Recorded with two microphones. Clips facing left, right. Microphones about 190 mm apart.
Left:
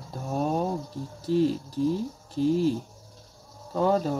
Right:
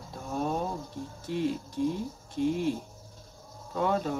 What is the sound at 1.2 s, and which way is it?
Speech, 35° left (ahead or behind).